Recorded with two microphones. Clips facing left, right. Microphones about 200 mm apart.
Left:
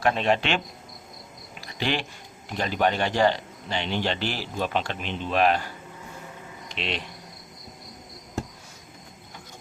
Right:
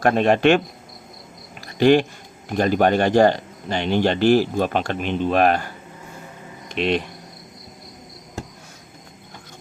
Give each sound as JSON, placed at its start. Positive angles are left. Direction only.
{"t": 0.0, "sound": "speech", "side_deg": -50}
{"t": 1.6, "sound": "a sound", "side_deg": -45}
{"t": 2.5, "sound": "speech", "side_deg": -50}